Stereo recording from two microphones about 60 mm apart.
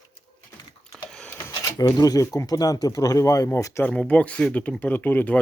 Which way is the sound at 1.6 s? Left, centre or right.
Left.